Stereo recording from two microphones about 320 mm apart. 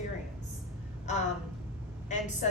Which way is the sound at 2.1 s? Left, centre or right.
Left.